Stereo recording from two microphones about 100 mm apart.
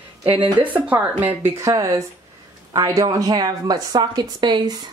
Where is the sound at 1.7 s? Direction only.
35° right (ahead or behind).